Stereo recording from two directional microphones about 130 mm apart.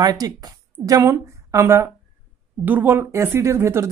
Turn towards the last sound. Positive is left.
turn(degrees=-20)  # may be behind; listen again after turning